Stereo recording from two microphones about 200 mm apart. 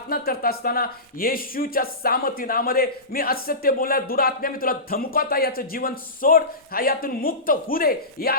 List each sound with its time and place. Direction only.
0.1 s speech: 50° left (ahead or behind)